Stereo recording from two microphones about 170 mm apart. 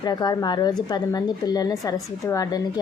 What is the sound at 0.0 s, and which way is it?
Speech, 25° left (ahead or behind).